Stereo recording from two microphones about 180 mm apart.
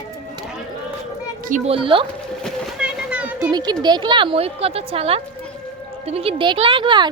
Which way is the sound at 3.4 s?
25° right (ahead or behind).